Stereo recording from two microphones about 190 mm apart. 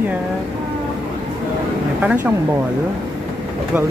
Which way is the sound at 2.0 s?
10° right (ahead or behind).